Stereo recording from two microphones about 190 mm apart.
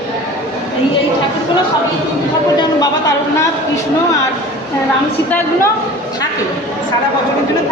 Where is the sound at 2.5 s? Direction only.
20° left (ahead or behind).